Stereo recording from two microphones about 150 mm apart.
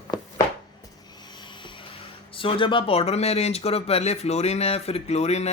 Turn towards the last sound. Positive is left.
turn(degrees=45)  # may be behind; listen again after turning